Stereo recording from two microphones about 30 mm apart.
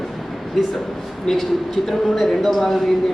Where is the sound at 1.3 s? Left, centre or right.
Centre.